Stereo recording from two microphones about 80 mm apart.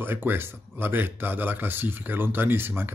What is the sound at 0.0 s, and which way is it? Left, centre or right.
Speech, right.